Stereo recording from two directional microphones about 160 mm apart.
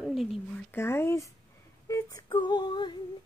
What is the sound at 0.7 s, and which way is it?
A woman's voice, 15° left (ahead or behind).